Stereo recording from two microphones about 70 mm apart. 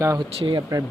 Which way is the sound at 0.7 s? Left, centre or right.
Right.